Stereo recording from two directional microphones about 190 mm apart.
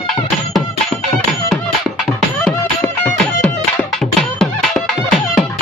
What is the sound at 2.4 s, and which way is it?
Music, 5° left (ahead or behind).